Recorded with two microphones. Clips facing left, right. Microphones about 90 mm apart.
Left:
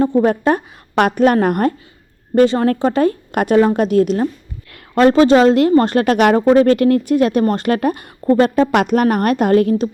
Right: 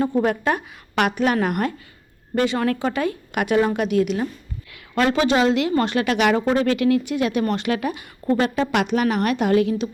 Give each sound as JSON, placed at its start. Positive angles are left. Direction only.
{"t": 0.0, "sound": "a woman's voice", "side_deg": 30}